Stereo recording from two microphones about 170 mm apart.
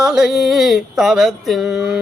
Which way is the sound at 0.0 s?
5° right (ahead or behind).